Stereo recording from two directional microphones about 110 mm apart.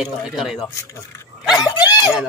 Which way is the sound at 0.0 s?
5° right (ahead or behind).